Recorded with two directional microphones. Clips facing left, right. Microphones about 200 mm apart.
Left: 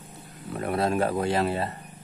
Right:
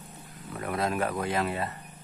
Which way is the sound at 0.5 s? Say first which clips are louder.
Left 4 dB; 30° left (ahead or behind).